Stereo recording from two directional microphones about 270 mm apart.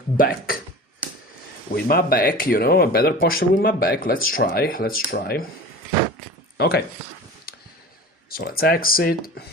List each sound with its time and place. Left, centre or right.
0.2 s speech: left
1.7 s speech: left
6.6 s speech: left
7.5 s a sound: left
8.3 s speech: left